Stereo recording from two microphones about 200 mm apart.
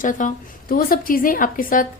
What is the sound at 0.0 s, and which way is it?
A woman's voice, 40° left (ahead or behind).